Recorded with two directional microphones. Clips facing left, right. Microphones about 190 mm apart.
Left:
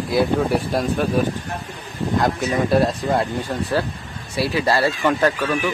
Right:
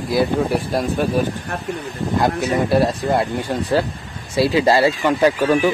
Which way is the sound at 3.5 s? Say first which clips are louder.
Right 5 dB; 15° right (ahead or behind).